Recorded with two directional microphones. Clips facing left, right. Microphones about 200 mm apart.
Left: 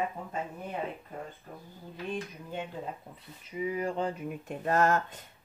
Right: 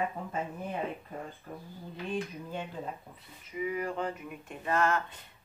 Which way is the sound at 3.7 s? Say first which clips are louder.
Left 3 dB; 30° left (ahead or behind).